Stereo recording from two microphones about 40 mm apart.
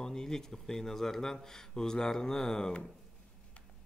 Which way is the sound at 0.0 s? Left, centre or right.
Centre.